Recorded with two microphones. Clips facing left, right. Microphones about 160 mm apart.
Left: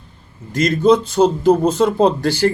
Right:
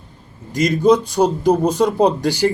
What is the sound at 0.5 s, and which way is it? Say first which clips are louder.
A man's voice: even; 15° right (ahead or behind).